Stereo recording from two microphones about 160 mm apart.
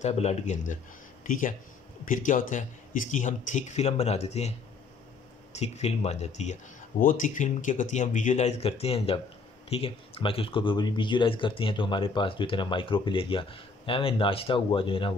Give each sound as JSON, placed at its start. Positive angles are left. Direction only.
{"t": 0.0, "sound": "speech", "side_deg": 40}
{"t": 1.2, "sound": "speech", "side_deg": 55}